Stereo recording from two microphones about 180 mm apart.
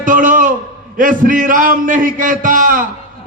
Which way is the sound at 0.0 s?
50° right (ahead or behind).